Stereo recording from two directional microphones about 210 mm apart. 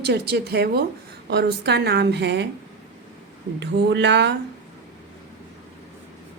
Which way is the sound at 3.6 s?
55° right (ahead or behind).